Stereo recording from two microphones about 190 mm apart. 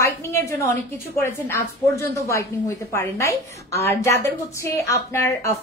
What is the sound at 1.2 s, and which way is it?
A woman's voice, 15° left (ahead or behind).